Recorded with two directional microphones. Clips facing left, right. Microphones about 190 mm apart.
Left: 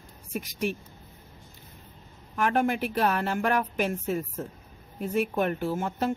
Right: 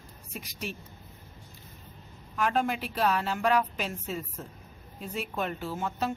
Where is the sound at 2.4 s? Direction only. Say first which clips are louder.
Left 3 dB; 55° left (ahead or behind).